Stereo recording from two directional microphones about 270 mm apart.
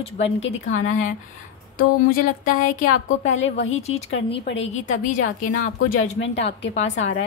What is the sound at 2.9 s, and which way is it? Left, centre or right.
Speech, left.